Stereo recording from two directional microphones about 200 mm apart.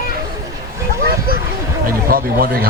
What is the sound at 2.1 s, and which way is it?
Speech, 45° right (ahead or behind).